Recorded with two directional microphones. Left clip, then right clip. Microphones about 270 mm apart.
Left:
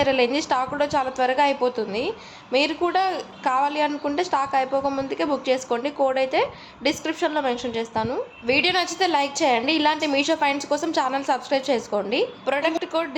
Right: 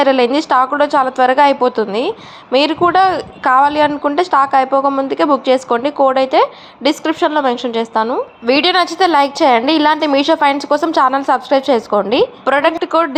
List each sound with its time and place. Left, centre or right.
0.0 s a woman's voice: centre